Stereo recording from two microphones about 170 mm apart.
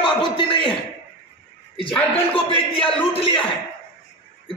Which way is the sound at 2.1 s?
30° left (ahead or behind).